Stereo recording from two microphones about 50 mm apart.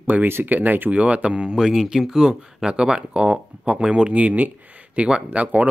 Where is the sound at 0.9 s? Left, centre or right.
Right.